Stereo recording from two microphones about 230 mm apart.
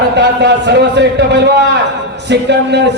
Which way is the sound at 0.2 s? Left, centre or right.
Right.